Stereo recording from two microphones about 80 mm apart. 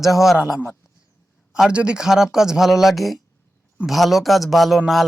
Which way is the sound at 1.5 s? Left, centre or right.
Centre.